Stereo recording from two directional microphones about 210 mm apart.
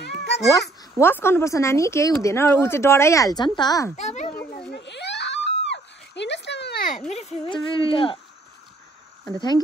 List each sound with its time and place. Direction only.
0.5 s speech: 15° left (ahead or behind)
3.9 s a child's voice: 35° left (ahead or behind)
4.5 s screaming: 45° left (ahead or behind)
7.1 s speech: 30° left (ahead or behind)